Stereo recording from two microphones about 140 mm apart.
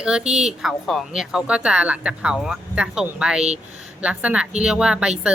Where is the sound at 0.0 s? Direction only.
5° right (ahead or behind).